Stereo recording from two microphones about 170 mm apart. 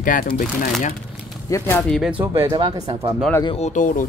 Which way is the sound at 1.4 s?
15° left (ahead or behind).